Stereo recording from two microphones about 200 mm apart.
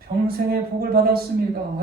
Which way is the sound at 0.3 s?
50° right (ahead or behind).